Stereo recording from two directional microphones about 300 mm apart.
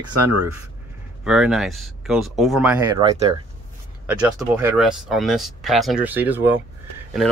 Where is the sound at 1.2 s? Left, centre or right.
Centre.